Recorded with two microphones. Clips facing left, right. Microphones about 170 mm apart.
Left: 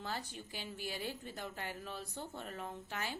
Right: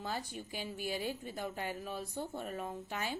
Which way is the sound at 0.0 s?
15° right (ahead or behind).